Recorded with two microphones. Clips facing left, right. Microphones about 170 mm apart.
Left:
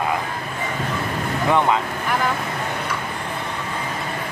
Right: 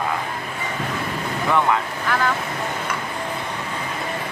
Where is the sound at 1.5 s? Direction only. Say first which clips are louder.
Left 1 dB; 20° left (ahead or behind).